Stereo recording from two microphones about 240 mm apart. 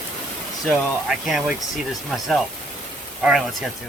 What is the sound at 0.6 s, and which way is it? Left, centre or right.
Speech, centre.